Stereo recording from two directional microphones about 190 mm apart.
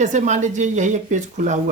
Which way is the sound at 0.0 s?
40° right (ahead or behind).